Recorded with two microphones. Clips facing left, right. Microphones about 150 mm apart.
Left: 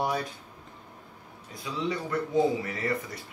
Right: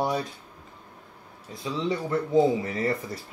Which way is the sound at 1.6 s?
25° right (ahead or behind).